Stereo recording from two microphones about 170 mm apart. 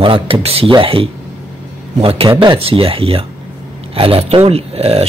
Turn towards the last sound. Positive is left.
turn(degrees=-35)  # may be behind; listen again after turning